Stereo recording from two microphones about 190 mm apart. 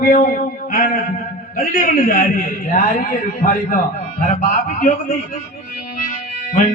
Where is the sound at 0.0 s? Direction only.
45° left (ahead or behind).